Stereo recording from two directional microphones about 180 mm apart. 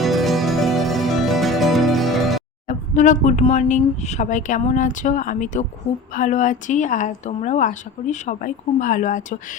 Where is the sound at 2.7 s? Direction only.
45° left (ahead or behind).